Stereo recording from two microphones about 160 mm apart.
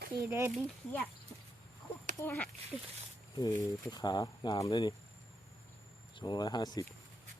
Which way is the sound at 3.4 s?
25° left (ahead or behind).